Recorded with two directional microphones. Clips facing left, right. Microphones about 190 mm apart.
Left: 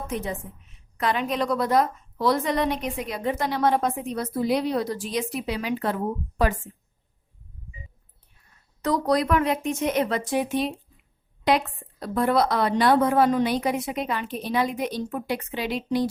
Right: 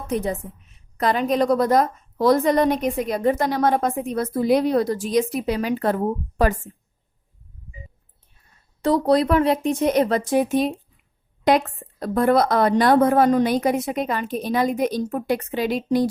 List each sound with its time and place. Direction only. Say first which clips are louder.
0.1 s a woman's voice: right 9 dB; 35° right (ahead or behind)
8.8 s a woman's voice: right 5 dB; 30° right (ahead or behind); by 16.0 s 45° right (ahead or behind)